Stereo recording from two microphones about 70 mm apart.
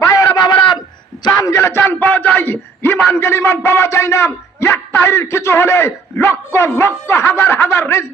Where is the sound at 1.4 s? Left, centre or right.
Left.